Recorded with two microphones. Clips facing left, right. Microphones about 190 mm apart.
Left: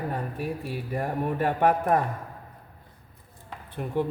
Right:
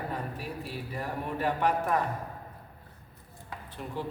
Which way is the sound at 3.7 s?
55° left (ahead or behind).